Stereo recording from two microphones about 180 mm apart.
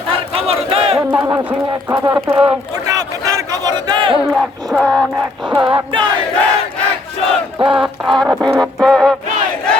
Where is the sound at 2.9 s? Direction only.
20° right (ahead or behind).